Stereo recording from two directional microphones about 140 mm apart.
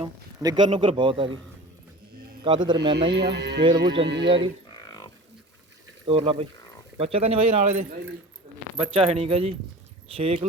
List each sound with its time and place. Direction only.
0.4 s a man's voice: 35° right (ahead or behind)
2.4 s a man's voice: 35° right (ahead or behind)
6.1 s a man's voice: 40° right (ahead or behind)